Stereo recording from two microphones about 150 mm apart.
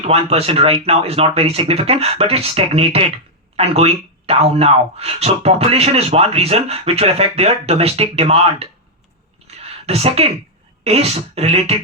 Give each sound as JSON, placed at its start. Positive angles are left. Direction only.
{"t": 0.0, "sound": "speech", "side_deg": -40}
{"t": 9.6, "sound": "a sound", "side_deg": -45}
{"t": 10.8, "sound": "speech", "side_deg": -45}